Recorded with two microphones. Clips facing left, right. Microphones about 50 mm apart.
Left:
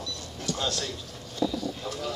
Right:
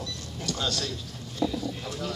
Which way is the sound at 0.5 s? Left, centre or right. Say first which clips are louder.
Even; centre.